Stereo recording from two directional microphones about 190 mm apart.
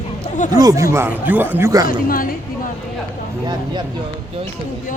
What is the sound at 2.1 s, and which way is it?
Speech, 50° left (ahead or behind).